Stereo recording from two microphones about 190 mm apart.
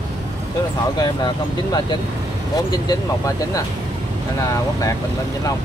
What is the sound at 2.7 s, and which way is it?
Speech, 20° left (ahead or behind).